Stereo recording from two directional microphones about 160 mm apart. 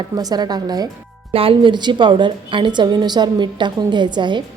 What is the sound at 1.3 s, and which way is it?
A woman's voice, 35° right (ahead or behind).